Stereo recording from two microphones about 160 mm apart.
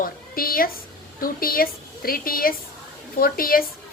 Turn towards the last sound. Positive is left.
turn(degrees=65)  # may be behind; listen again after turning